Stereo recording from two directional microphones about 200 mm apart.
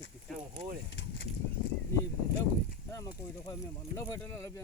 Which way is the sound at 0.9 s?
60° left (ahead or behind).